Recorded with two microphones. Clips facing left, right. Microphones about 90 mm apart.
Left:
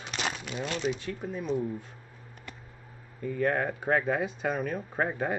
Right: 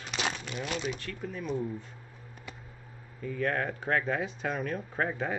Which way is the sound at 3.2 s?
5° left (ahead or behind).